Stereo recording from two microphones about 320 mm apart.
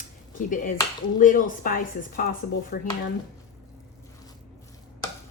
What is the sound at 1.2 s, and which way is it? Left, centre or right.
A woman's voice, left.